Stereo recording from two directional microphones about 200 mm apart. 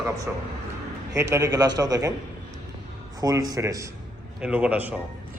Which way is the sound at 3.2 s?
20° right (ahead or behind).